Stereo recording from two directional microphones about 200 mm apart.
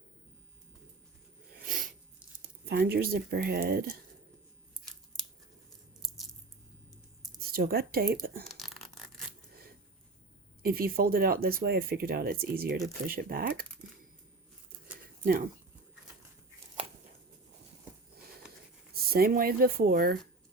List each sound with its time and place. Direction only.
1.6 s a sound: 45° right (ahead or behind)
2.4 s speech: 50° right (ahead or behind)
7.5 s speech: 50° right (ahead or behind)
8.4 s a sound: centre (ahead or behind)
10.6 s speech: 50° right (ahead or behind)
15.2 s speech: 45° right (ahead or behind)
19.1 s speech: 50° right (ahead or behind)